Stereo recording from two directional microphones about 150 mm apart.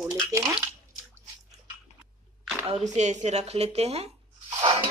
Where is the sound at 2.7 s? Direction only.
50° right (ahead or behind).